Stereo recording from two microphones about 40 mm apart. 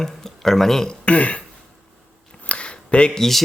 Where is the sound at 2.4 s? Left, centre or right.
Left.